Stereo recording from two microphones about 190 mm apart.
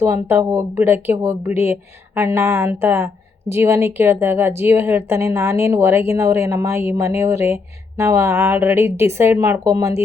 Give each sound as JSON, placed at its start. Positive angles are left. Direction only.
{"t": 0.0, "sound": "speech", "side_deg": -15}